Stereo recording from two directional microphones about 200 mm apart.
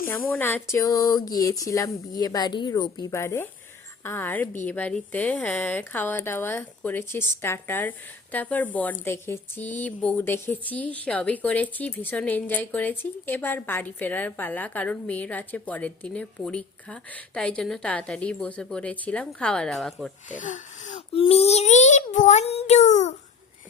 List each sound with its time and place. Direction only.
0.3 s a woman's voice: 10° left (ahead or behind)
20.2 s a child's voice: 40° left (ahead or behind)